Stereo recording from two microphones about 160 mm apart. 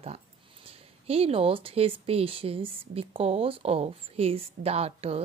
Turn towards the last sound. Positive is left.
turn(degrees=-40)  # may be behind; listen again after turning